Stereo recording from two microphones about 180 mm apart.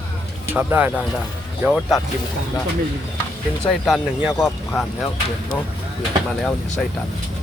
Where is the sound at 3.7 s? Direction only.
Centre (ahead or behind).